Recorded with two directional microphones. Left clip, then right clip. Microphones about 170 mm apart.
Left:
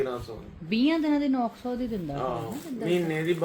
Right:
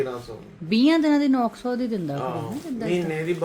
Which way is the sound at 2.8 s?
5° left (ahead or behind).